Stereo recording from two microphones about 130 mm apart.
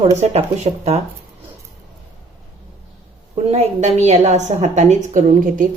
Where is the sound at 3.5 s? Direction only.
55° right (ahead or behind).